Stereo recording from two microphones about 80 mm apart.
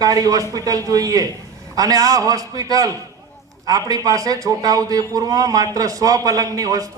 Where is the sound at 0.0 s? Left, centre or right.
Right.